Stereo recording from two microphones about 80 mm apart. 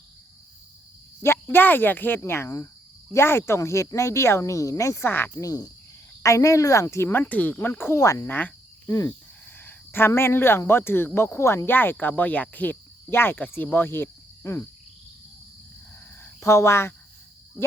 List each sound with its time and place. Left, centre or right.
1.2 s speech: left
5.0 s speech: left
5.4 s frog: left
6.2 s speech: left
7.9 s frog: left
8.3 s cricket: left
9.6 s speech: left
16.2 s speech: left